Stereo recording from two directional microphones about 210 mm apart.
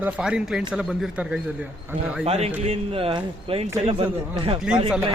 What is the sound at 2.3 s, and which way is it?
Speech, 30° right (ahead or behind).